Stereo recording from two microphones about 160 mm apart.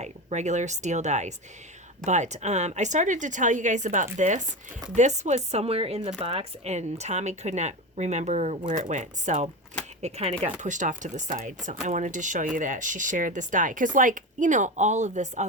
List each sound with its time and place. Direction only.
0.0 s a woman's voice: 45° right (ahead or behind)